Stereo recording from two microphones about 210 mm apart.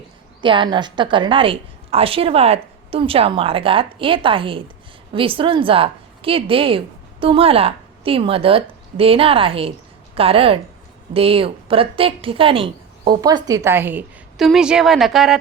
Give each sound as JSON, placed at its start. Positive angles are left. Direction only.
{"t": 0.4, "sound": "a woman's voice", "side_deg": -25}